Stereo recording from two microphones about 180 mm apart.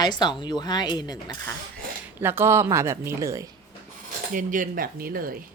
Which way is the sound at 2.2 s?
15° right (ahead or behind).